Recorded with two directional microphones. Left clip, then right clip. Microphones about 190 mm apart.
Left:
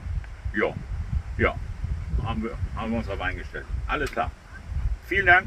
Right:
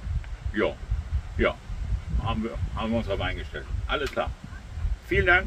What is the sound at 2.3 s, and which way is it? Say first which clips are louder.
Speech: right 1 dB; 10° right (ahead or behind).